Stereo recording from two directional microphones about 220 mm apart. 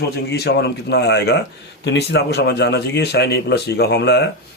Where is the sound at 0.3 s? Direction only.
45° left (ahead or behind).